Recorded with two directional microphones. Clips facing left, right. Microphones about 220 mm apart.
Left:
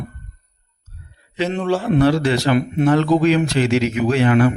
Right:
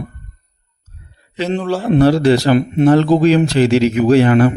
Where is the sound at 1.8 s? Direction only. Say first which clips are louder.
Right 6 dB; 35° right (ahead or behind).